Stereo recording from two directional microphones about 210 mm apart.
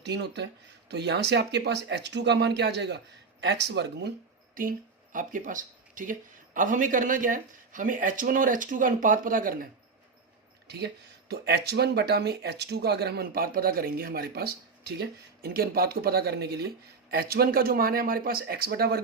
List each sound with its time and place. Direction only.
0.0 s speech: 55° right (ahead or behind)
5.1 s speech: 40° right (ahead or behind)
10.7 s speech: 50° right (ahead or behind)